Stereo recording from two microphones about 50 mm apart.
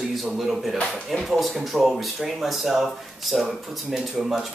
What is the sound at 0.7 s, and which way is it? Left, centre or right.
Speech, left.